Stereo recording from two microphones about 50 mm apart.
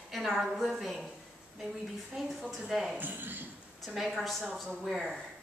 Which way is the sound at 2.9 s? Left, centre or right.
Right.